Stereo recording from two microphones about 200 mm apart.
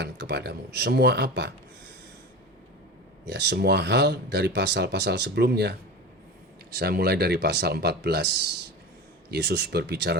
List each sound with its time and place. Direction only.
0.0 s speech: 55° right (ahead or behind)
3.2 s speech: 55° right (ahead or behind)
6.7 s speech: 50° right (ahead or behind)